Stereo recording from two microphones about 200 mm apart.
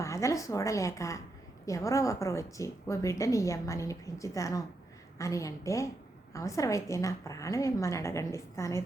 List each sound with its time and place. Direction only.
0.0 s a woman's voice: 15° left (ahead or behind)